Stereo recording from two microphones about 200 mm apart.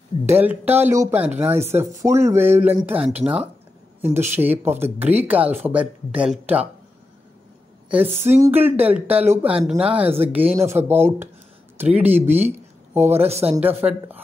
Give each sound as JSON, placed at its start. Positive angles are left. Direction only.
{"t": 0.3, "sound": "speech", "side_deg": -10}
{"t": 7.9, "sound": "speech", "side_deg": -10}
{"t": 13.3, "sound": "speech", "side_deg": -30}
{"t": 13.6, "sound": "speech", "side_deg": -10}